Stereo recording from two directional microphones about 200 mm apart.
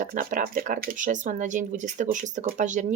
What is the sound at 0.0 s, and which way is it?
Speech, 45° right (ahead or behind).